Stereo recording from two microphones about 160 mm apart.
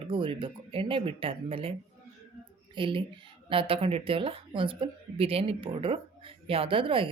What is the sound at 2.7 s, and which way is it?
A woman's voice, 30° right (ahead or behind).